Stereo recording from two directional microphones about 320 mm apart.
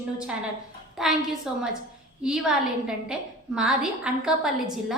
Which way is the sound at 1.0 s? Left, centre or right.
Centre.